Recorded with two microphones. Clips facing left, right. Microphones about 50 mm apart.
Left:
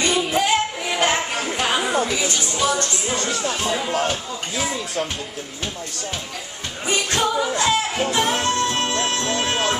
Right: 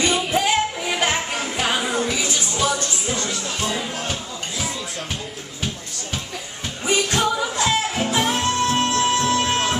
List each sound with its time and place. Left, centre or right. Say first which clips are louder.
0.3 s music: even; centre
3.2 s music: left 3 dB; left
7.2 s music: left 1 dB; centre